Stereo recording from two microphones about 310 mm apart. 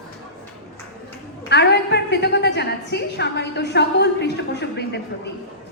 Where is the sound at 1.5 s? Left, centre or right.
Left.